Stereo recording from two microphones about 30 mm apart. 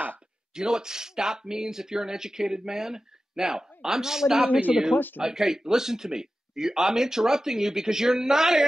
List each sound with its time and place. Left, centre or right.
0.6 s speech: right
4.5 s speech: right
5.2 s a man's voice: centre